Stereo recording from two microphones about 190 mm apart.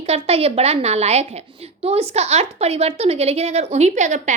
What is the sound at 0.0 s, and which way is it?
A woman's voice, 35° right (ahead or behind).